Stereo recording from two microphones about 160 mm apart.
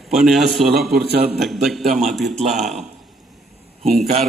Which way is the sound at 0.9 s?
80° right.